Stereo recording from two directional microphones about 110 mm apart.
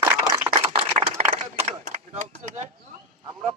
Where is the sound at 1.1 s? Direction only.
90° right.